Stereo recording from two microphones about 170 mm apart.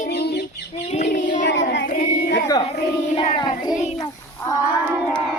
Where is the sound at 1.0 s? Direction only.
50° left (ahead or behind).